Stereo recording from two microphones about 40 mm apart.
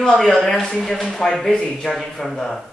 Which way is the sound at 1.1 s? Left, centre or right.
Centre.